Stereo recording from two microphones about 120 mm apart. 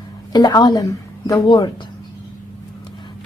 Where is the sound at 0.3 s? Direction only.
35° left (ahead or behind).